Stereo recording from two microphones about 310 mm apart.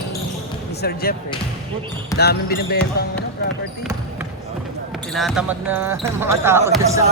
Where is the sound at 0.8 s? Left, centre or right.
Left.